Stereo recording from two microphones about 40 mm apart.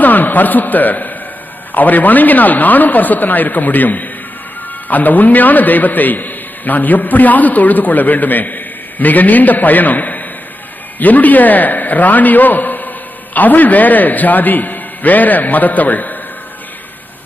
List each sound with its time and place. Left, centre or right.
0.0 s a man's voice: left